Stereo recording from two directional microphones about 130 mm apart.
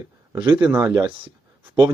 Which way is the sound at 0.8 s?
35° right (ahead or behind).